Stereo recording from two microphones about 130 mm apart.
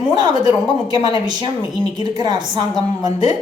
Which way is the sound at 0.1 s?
35° right (ahead or behind).